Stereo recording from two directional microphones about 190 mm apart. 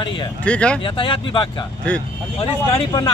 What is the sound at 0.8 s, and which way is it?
Speech, 25° left (ahead or behind).